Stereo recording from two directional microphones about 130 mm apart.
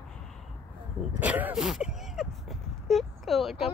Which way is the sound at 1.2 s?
15° right (ahead or behind).